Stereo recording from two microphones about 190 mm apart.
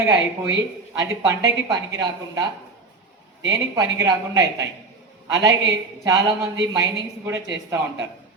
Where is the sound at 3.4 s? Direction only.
20° right (ahead or behind).